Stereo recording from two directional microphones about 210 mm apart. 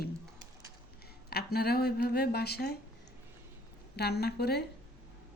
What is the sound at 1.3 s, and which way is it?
Speech, 50° left (ahead or behind).